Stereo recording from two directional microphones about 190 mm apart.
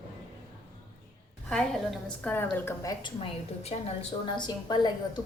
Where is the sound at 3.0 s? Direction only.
30° left (ahead or behind).